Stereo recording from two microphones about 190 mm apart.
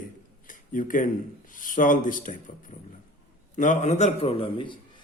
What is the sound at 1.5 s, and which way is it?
A man's voice, 45° left (ahead or behind).